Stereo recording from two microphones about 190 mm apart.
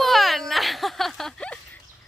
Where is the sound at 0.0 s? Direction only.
Centre (ahead or behind).